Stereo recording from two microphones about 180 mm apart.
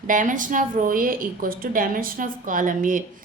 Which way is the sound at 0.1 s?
45° right (ahead or behind).